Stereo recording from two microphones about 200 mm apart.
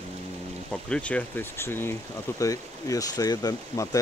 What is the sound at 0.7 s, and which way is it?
Speech, 5° left (ahead or behind).